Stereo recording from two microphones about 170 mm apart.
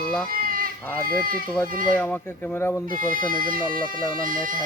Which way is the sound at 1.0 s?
55° right (ahead or behind).